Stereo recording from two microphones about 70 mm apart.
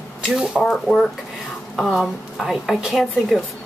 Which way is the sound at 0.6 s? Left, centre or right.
Centre.